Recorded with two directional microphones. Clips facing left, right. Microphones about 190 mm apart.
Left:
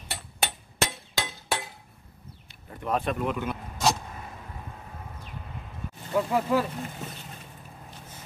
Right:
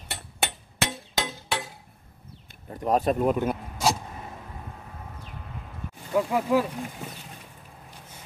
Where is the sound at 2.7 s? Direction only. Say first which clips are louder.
Right 5 dB; 40° right (ahead or behind).